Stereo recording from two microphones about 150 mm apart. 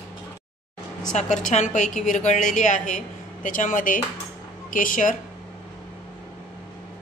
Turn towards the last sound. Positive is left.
turn(degrees=60)  # may be behind; listen again after turning